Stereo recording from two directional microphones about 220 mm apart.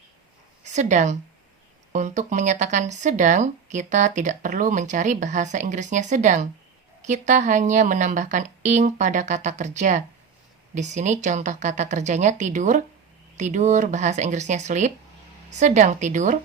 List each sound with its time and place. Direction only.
0.6 s speech: 30° right (ahead or behind)